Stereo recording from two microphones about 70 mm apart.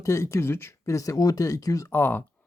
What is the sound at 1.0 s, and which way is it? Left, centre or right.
Speech, left.